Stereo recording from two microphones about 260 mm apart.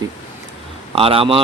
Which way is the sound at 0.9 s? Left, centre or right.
Right.